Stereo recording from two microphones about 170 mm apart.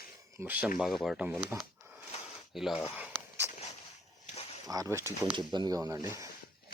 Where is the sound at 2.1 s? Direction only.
40° left (ahead or behind).